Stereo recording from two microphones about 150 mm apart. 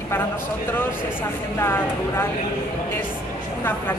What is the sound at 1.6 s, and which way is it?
Speech, 15° left (ahead or behind).